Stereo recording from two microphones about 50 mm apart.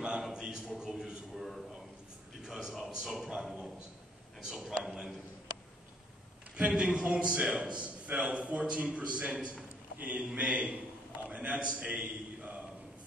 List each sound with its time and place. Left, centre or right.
0.3 s a man's voice: centre
1.3 s a man's voice: centre
6.7 s a man's voice: centre
11.2 s a sound: right